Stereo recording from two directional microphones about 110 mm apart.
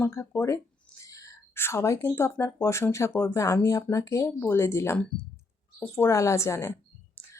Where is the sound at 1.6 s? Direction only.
25° left (ahead or behind).